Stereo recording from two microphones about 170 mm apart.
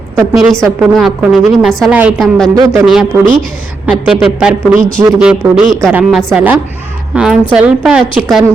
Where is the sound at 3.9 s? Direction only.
5° right (ahead or behind).